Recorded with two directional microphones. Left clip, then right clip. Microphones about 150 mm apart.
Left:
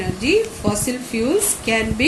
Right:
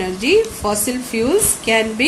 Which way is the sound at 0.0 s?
70° right (ahead or behind).